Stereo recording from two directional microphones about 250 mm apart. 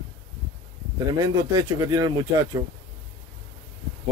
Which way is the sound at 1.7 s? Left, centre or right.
Centre.